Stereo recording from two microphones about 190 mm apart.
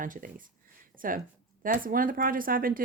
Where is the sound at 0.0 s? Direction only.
45° right (ahead or behind).